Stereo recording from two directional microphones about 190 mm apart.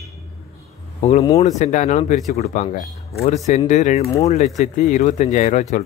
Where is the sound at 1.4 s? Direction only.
40° left (ahead or behind).